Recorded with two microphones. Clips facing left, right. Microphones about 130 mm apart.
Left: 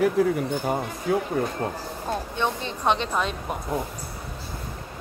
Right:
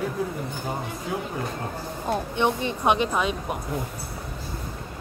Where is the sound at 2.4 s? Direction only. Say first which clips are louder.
Right 3 dB; 15° right (ahead or behind).